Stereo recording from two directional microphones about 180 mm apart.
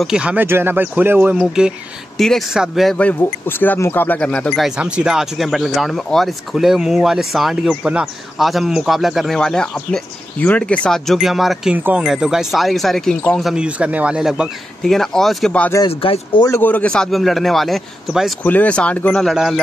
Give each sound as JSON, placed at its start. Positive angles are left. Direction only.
{"t": 0.0, "sound": "speech", "side_deg": -5}
{"t": 15.9, "sound": "speech", "side_deg": 30}
{"t": 16.4, "sound": "speech", "side_deg": 10}